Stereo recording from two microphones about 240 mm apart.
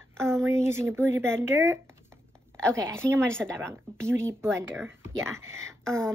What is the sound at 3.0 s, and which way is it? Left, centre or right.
Speech, centre.